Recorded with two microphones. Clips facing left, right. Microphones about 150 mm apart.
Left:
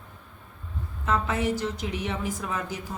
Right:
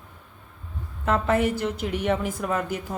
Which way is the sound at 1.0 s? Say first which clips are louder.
Right 4 dB; 55° right (ahead or behind).